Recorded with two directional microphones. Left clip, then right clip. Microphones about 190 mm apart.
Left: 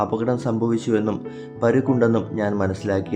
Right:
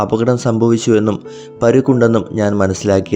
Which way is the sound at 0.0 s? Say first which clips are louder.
Right 7 dB; 35° right (ahead or behind).